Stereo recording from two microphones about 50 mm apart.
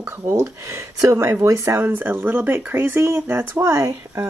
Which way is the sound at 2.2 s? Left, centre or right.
Right.